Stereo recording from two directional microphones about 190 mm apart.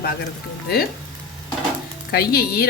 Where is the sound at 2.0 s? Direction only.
55° left (ahead or behind).